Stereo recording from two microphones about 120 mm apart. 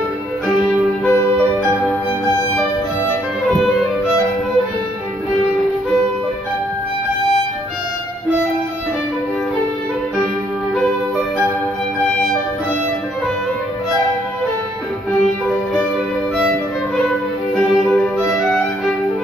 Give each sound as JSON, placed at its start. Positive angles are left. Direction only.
{"t": 1.0, "sound": "music", "side_deg": 20}
{"t": 18.3, "sound": "violin", "side_deg": 5}